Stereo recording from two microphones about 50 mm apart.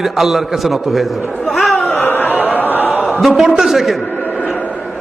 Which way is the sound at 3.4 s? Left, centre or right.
Centre.